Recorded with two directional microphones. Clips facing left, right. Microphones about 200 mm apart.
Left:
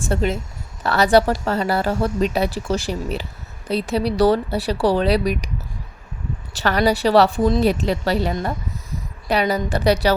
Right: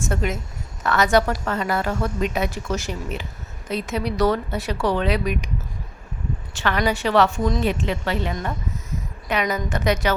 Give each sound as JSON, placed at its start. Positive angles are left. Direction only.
{"t": 0.0, "sound": "a woman's voice", "side_deg": 30}
{"t": 6.5, "sound": "a woman's voice", "side_deg": 35}